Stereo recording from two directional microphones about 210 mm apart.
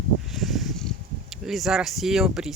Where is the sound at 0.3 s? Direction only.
Centre (ahead or behind).